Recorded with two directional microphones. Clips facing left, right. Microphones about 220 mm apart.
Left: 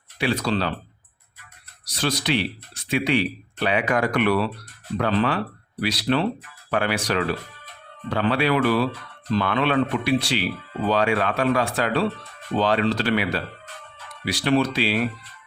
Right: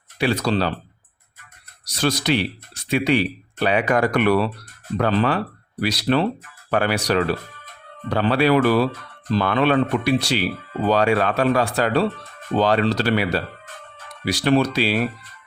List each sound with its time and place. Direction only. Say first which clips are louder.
0.2 s speech: right 3 dB; 40° right (ahead or behind)
1.8 s speech: right 4 dB; 45° right (ahead or behind)